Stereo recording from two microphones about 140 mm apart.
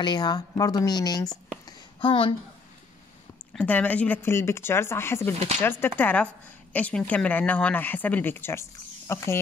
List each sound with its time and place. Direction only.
0.0 s speech: 30° left (ahead or behind)
1.7 s a sound: 35° left (ahead or behind)
3.5 s speech: 10° left (ahead or behind)